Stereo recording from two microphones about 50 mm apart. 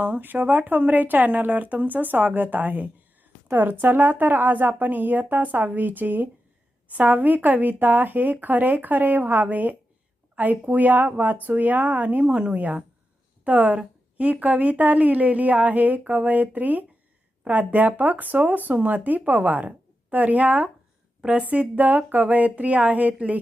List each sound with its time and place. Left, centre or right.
0.0 s a woman's voice: right